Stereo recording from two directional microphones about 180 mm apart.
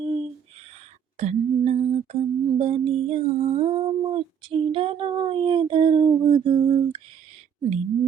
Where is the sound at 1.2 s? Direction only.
35° right (ahead or behind).